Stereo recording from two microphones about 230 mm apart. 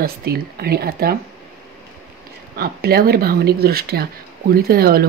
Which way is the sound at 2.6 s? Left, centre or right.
Right.